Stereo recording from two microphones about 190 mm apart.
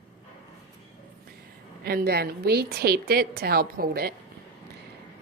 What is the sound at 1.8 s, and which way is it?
A woman's voice, 55° right (ahead or behind).